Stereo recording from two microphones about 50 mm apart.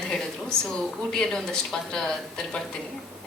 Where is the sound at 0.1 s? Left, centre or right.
Centre.